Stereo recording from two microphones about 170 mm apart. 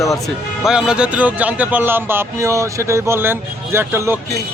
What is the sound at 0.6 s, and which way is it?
Speech, 5° right (ahead or behind).